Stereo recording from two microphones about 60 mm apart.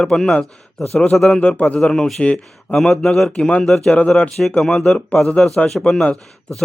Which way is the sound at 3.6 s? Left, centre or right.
Centre.